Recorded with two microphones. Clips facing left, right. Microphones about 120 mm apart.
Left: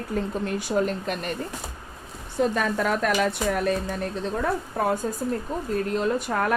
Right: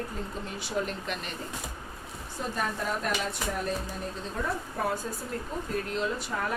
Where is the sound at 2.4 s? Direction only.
85° left; by 4.8 s 70° left (ahead or behind).